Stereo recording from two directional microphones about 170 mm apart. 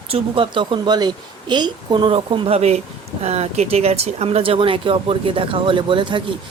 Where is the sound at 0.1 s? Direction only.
30° right (ahead or behind).